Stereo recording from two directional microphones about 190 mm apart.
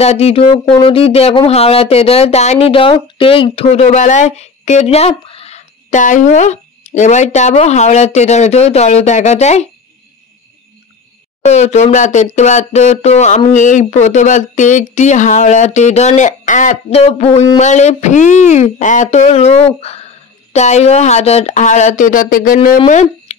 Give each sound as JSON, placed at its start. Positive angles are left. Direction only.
{"t": 0.0, "sound": "speech", "side_deg": 35}
{"t": 11.4, "sound": "speech", "side_deg": 35}